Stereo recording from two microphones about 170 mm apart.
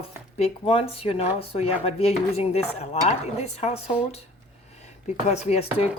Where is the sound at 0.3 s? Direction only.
35° left (ahead or behind).